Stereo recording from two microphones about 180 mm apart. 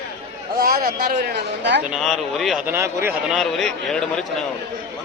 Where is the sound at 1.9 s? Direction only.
Centre (ahead or behind).